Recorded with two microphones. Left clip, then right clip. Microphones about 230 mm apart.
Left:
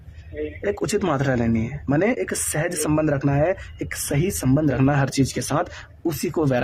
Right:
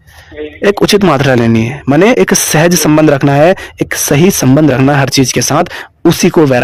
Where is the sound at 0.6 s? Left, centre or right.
Right.